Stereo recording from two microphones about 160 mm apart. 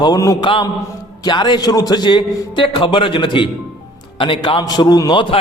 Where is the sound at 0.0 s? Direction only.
20° left (ahead or behind).